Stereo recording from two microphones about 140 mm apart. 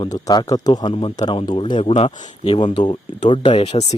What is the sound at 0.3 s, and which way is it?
Speech, 30° left (ahead or behind).